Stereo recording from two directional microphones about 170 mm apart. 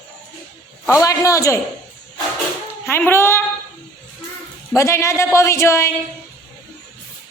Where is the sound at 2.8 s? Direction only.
15° left (ahead or behind).